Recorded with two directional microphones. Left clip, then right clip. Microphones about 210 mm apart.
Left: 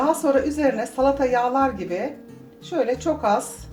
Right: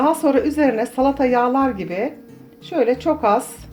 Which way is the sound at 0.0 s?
40° right (ahead or behind).